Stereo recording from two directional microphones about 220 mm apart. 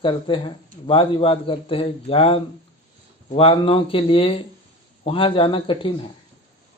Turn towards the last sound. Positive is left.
turn(degrees=20)  # may be behind; listen again after turning